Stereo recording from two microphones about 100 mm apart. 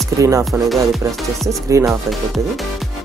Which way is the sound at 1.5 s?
30° right (ahead or behind).